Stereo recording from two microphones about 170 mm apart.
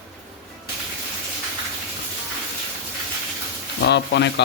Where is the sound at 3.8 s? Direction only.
90° left.